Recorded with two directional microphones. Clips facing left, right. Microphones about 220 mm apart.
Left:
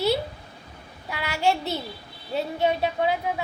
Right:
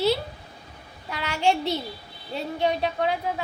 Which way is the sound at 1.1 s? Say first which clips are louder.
Even; 10° left (ahead or behind).